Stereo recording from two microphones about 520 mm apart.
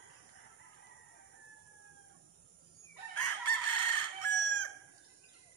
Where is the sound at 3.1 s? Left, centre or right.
Left.